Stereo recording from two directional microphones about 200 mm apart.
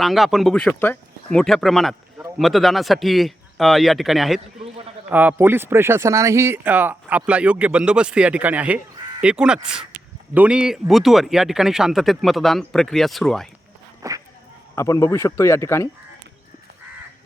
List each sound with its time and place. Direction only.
0.0 s speech: centre (ahead or behind)
14.0 s speech: 15° right (ahead or behind)
14.8 s speech: 15° left (ahead or behind)